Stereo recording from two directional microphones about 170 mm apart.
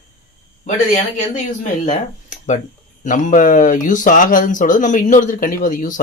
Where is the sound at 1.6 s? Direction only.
45° left (ahead or behind).